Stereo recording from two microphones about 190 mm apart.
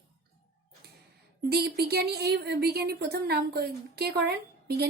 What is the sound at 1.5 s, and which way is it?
A woman's voice, 60° right (ahead or behind).